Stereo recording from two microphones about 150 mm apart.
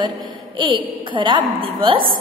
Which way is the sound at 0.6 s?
30° right (ahead or behind).